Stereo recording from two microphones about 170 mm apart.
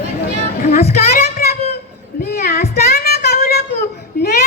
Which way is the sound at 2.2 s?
70° left (ahead or behind).